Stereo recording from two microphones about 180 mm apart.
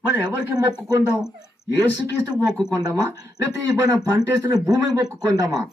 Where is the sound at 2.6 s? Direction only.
20° right (ahead or behind).